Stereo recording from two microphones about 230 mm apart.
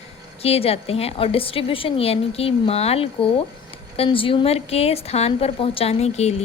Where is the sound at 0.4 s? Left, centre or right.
Left.